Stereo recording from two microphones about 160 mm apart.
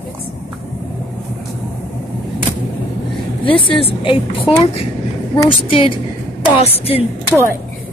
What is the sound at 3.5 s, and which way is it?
A woman's voice, 35° left (ahead or behind).